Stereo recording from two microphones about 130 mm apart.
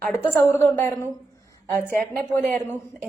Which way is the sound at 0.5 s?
20° left (ahead or behind).